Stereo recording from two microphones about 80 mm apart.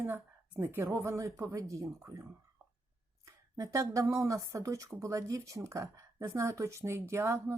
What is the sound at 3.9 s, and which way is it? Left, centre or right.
Speech, right.